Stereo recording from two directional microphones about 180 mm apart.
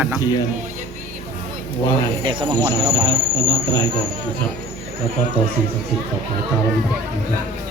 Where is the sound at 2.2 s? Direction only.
25° right (ahead or behind).